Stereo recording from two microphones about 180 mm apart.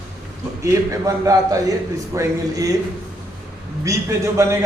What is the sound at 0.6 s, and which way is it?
A man's voice, 15° right (ahead or behind).